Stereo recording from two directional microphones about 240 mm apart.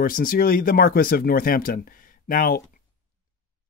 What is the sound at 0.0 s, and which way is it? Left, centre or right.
Speech, left.